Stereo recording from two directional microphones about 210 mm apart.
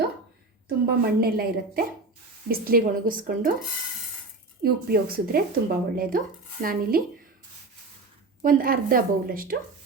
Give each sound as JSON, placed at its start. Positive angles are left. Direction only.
{"t": 0.9, "sound": "speech", "side_deg": -45}
{"t": 4.6, "sound": "speech", "side_deg": -45}
{"t": 8.4, "sound": "speech", "side_deg": -40}